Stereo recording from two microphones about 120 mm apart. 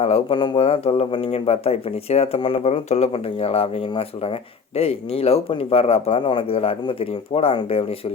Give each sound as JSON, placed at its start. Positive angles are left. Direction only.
{"t": 0.0, "sound": "speech", "side_deg": 50}